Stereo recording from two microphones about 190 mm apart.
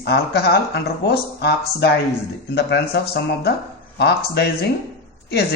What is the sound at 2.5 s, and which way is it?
A man's voice, 60° left (ahead or behind).